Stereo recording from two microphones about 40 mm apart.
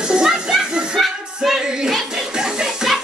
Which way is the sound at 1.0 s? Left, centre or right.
Centre.